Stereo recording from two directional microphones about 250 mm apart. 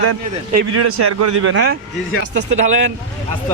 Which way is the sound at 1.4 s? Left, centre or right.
Right.